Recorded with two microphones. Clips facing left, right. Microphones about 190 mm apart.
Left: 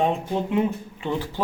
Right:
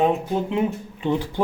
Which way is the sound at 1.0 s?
15° right (ahead or behind).